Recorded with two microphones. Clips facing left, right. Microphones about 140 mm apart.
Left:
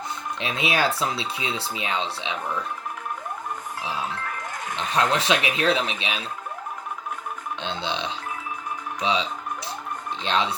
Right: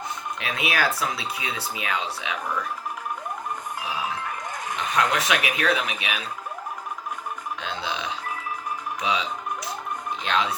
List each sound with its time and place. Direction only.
0.3 s speech: 25° left (ahead or behind)
4.8 s speech: 30° left (ahead or behind)
7.6 s speech: 25° left (ahead or behind)
10.2 s speech: 30° left (ahead or behind)